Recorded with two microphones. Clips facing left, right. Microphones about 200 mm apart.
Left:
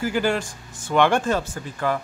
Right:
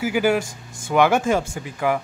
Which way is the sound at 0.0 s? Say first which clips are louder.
Right 3 dB; 10° right (ahead or behind).